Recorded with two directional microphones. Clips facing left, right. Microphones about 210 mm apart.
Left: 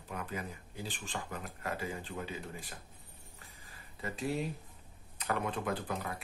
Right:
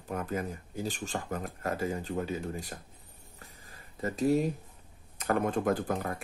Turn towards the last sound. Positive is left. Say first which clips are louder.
# right 7 dB
turn(degrees=-45)  # may be behind; listen again after turning